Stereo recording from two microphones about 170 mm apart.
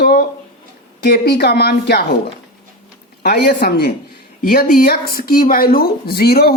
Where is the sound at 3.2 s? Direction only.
75° left (ahead or behind).